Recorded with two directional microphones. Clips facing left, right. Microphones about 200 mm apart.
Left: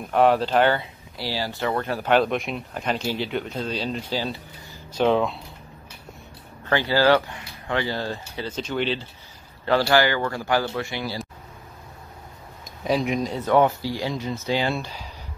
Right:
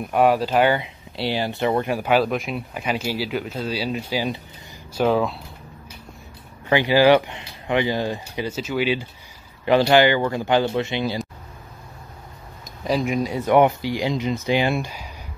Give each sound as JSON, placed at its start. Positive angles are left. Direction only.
{"t": 0.0, "sound": "speech", "side_deg": -10}
{"t": 1.1, "sound": "speech", "side_deg": -20}
{"t": 6.6, "sound": "speech", "side_deg": -15}
{"t": 9.7, "sound": "speech", "side_deg": -20}
{"t": 12.8, "sound": "speech", "side_deg": 0}